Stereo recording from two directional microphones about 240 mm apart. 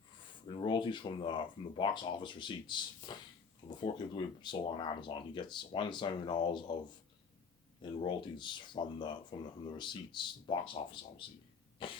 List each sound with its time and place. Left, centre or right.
0.4 s speech: centre
7.8 s speech: centre
11.8 s speech: left